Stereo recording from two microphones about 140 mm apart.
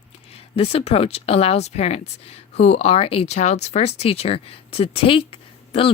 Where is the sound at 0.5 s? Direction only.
45° left (ahead or behind).